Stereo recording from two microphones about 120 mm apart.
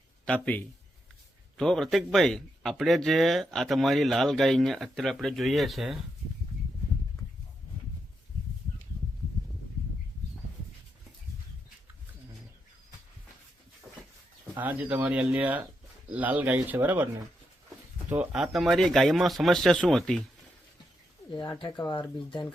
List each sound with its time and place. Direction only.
0.3 s speech: 10° left (ahead or behind)
14.6 s speech: 10° right (ahead or behind)
18.2 s speech: 5° right (ahead or behind)
21.6 s speech: 40° left (ahead or behind)